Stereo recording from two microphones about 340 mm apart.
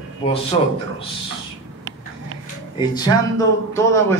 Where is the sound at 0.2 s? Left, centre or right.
Centre.